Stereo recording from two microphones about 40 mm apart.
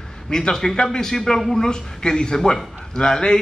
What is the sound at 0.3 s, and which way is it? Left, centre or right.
A man's voice, centre.